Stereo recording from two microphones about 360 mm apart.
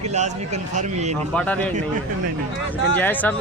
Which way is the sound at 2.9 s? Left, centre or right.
Centre.